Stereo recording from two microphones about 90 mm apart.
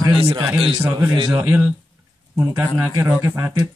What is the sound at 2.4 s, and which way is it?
Speech, 30° right (ahead or behind).